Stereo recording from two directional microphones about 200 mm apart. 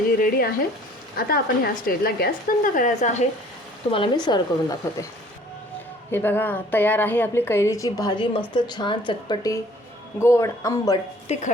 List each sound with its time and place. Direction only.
0.2 s speech: 50° left (ahead or behind)
3.9 s speech: 25° left (ahead or behind)
6.1 s a woman's voice: 10° left (ahead or behind)